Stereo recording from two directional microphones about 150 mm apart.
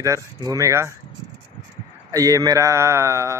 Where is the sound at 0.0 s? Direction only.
20° right (ahead or behind).